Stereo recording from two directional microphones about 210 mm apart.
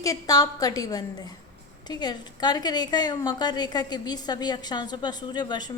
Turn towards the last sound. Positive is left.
turn(degrees=20)  # may be behind; listen again after turning